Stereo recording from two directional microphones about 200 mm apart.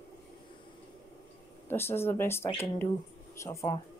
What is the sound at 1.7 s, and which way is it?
Speech, 10° left (ahead or behind).